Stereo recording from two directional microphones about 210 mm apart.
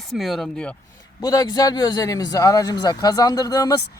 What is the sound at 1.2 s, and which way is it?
Speech, 15° left (ahead or behind).